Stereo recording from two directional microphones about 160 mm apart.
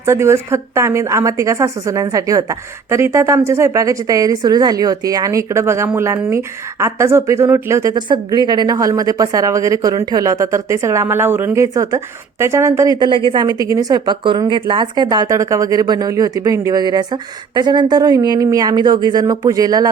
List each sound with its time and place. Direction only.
0.0 s a woman's voice: 15° right (ahead or behind)